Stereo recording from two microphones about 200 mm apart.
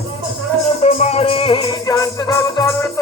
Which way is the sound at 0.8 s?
35° left (ahead or behind).